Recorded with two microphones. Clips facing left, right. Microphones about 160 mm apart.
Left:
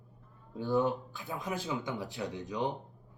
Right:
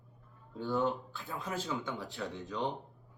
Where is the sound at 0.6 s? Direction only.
20° left (ahead or behind).